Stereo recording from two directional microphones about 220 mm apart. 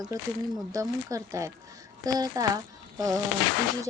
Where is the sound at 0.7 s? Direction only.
15° right (ahead or behind).